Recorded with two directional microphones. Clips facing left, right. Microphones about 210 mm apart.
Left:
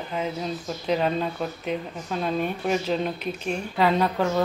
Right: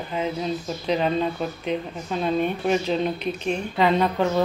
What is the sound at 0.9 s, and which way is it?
A woman's voice, 5° left (ahead or behind).